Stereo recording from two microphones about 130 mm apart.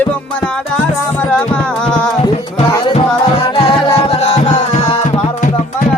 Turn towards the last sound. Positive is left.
turn(degrees=60)  # may be behind; listen again after turning